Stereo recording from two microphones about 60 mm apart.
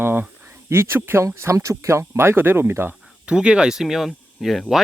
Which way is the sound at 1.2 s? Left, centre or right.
Right.